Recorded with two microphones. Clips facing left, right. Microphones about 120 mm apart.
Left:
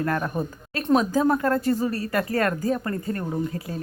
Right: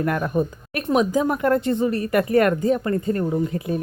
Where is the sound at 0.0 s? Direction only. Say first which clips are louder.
Right 4 dB; 15° right (ahead or behind).